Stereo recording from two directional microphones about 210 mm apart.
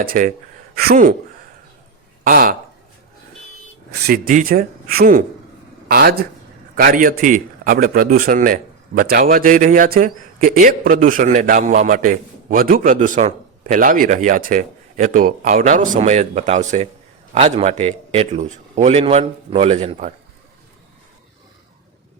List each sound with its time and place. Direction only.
0.0 s a man's voice: 40° right (ahead or behind)
2.2 s a man's voice: 40° right (ahead or behind)
3.9 s a man's voice: 45° right (ahead or behind)